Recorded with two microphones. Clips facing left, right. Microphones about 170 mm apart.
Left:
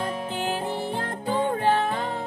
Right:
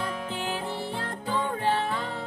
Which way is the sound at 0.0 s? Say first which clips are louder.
Left 4 dB; 50° left (ahead or behind).